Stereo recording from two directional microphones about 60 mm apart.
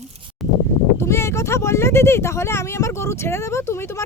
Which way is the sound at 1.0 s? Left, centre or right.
Left.